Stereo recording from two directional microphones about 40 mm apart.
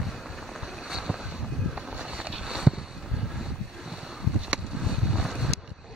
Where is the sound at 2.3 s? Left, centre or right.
Centre.